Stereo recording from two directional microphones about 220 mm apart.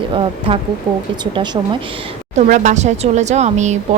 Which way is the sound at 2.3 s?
35° right (ahead or behind).